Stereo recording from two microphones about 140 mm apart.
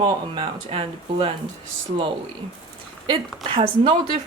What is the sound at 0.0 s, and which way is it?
Speech, 40° right (ahead or behind).